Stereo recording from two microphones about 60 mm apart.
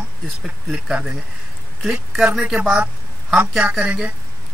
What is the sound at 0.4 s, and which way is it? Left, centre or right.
Speech, centre.